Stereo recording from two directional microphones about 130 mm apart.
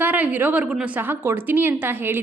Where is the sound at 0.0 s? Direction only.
15° right (ahead or behind).